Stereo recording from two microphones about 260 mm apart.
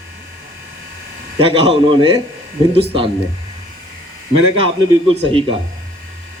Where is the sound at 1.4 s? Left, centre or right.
Right.